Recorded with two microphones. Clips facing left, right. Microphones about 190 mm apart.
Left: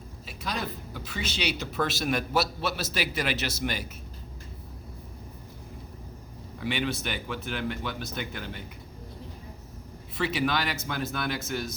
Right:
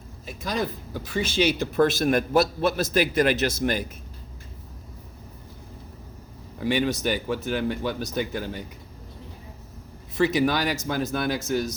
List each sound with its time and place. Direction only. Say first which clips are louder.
0.3 s speech: right 6 dB; 45° right (ahead or behind)
6.6 s speech: right 6 dB; 45° right (ahead or behind)
10.2 s speech: right 5 dB; 40° right (ahead or behind)